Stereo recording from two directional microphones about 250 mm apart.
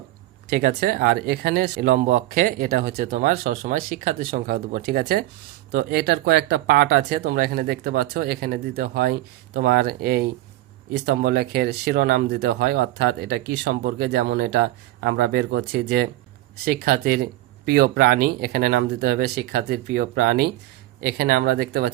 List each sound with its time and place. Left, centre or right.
0.4 s speech: right